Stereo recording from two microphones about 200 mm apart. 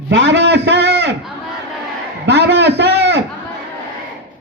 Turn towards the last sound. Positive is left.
turn(degrees=-60)  # may be behind; listen again after turning